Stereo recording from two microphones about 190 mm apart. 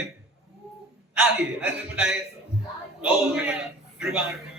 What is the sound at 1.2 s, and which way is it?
A man's voice, 5° right (ahead or behind).